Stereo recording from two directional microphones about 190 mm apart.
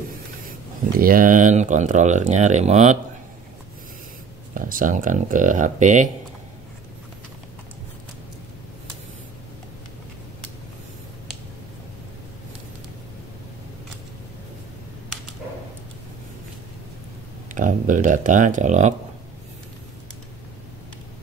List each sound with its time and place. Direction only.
0.9 s speech: 50° right (ahead or behind)
4.6 s speech: 45° right (ahead or behind)
17.6 s speech: 45° right (ahead or behind)